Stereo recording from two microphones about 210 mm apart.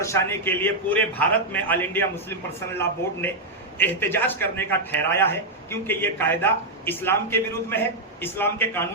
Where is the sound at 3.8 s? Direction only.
10° left (ahead or behind).